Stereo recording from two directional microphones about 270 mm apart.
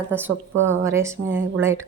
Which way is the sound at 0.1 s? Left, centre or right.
Centre.